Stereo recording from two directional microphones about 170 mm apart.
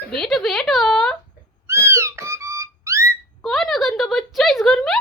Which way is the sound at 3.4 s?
Centre (ahead or behind).